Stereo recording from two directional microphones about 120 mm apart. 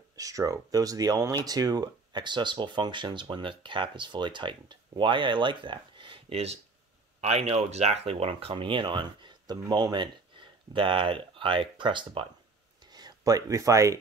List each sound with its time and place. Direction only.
0.1 s speech: 30° right (ahead or behind); by 12.3 s 45° right (ahead or behind)
12.9 s speech: 30° right (ahead or behind)